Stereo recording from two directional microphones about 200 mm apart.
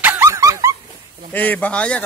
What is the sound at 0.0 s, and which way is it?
Dog, 10° right (ahead or behind).